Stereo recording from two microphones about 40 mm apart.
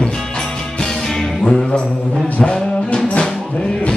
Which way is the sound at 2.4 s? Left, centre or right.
Left.